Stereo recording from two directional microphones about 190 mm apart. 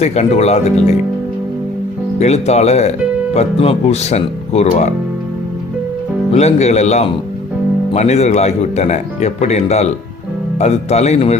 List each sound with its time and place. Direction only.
0.0 s speech: 35° left (ahead or behind)
2.1 s speech: 35° left (ahead or behind)
6.3 s speech: 35° left (ahead or behind)